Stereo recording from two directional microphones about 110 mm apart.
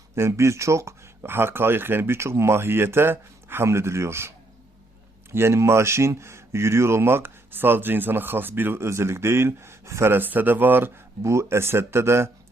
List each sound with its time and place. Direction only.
0.2 s speech: 25° right (ahead or behind)
5.3 s speech: 25° right (ahead or behind)